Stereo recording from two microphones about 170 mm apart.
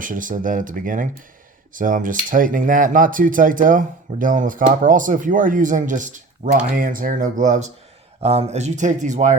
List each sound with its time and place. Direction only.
0.0 s speech: 50° right (ahead or behind)